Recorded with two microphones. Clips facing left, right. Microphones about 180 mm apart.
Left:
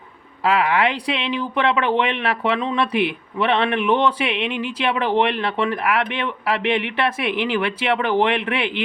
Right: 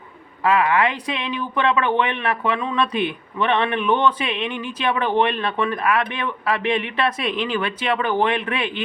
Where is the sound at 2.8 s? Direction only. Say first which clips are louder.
Left 2 dB; 70° left (ahead or behind).